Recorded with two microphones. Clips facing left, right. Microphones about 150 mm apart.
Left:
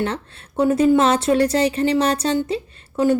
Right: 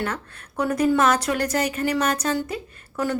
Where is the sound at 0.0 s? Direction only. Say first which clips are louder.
Left 4 dB; 25° left (ahead or behind).